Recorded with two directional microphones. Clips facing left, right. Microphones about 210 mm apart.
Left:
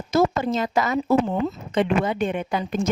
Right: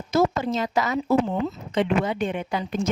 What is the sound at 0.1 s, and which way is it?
Speech, 50° left (ahead or behind).